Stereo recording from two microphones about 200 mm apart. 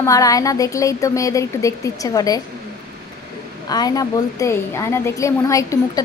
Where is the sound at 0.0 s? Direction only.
15° left (ahead or behind).